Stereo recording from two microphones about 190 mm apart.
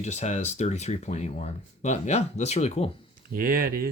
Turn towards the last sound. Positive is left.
turn(degrees=-50)  # may be behind; listen again after turning